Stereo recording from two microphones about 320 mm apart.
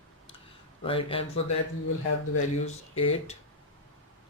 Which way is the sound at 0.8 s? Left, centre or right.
Centre.